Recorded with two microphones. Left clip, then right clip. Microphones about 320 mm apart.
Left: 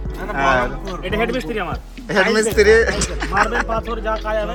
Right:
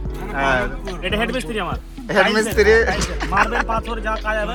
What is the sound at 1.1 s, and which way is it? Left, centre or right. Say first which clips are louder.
Speech: left 2 dB; right.